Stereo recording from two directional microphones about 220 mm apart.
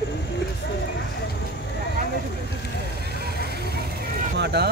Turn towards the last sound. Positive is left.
turn(degrees=-50)  # may be behind; listen again after turning